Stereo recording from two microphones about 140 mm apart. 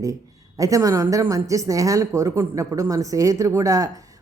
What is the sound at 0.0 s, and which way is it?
A woman's voice, 25° right (ahead or behind).